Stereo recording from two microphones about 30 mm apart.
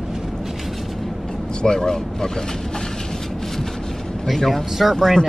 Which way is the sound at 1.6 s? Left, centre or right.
Left.